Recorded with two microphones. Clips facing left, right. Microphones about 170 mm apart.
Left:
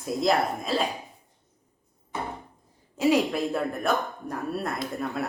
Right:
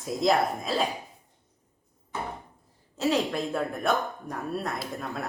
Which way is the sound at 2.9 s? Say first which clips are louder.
Left 3 dB; 10° left (ahead or behind).